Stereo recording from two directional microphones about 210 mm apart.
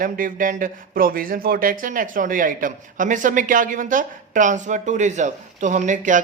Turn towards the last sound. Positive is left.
turn(degrees=-35)  # may be behind; listen again after turning